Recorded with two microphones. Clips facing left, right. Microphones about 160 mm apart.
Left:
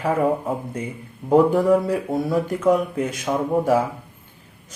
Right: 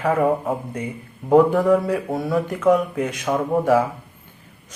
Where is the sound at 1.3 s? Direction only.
35° left (ahead or behind).